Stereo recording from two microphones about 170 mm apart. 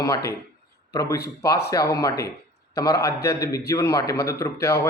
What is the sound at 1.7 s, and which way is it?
A man's voice, 20° left (ahead or behind).